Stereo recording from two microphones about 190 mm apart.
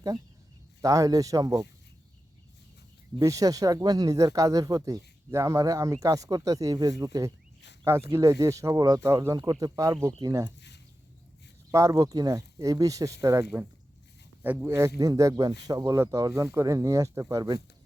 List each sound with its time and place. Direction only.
0.8 s speech: 15° right (ahead or behind)
3.2 s speech: 15° right (ahead or behind)
11.7 s speech: 15° right (ahead or behind)